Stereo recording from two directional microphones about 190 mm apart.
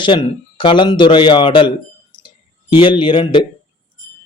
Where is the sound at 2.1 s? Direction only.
25° left (ahead or behind).